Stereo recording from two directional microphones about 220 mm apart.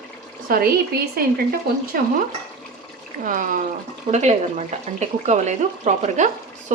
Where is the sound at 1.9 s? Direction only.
40° right (ahead or behind).